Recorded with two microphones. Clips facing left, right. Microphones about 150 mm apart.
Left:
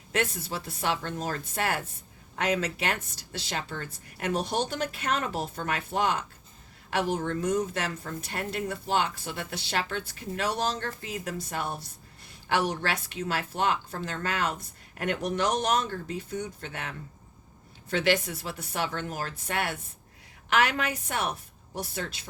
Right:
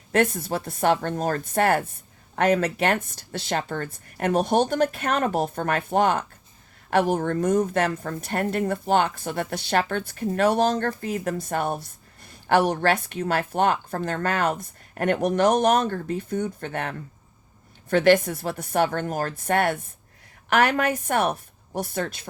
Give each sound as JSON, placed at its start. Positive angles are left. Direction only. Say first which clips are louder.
{"t": 0.1, "sound": "a woman's voice", "louder": "right 8 dB", "side_deg": -50}